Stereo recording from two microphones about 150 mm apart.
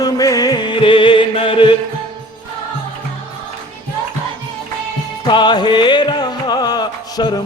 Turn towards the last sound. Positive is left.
turn(degrees=25)  # may be behind; listen again after turning